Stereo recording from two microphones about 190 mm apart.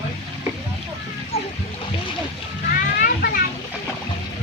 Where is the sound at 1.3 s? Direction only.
35° left (ahead or behind).